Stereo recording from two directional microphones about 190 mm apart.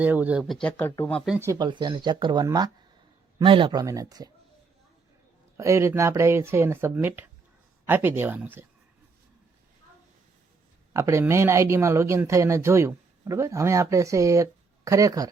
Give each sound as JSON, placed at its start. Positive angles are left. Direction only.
{"t": 0.0, "sound": "speech", "side_deg": -10}
{"t": 1.4, "sound": "speech", "side_deg": -20}
{"t": 5.5, "sound": "speech", "side_deg": -15}
{"t": 10.9, "sound": "speech", "side_deg": -15}